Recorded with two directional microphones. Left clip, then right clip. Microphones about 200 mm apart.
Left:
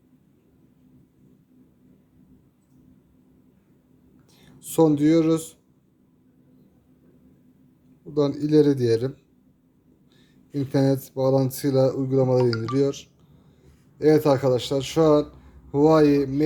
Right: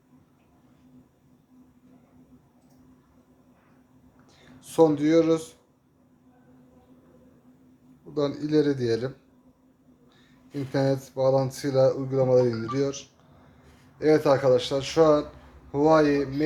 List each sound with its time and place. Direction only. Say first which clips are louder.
4.4 s speech: even; 45° left (ahead or behind)
8.1 s speech: left 4 dB; 50° left (ahead or behind)
10.5 s speech: left 3 dB; 45° left (ahead or behind)